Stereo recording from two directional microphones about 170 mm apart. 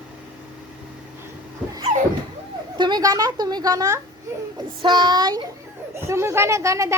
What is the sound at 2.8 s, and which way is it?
A woman's voice, 25° right (ahead or behind).